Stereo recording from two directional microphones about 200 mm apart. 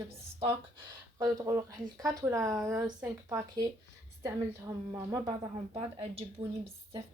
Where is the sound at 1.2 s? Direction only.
15° right (ahead or behind).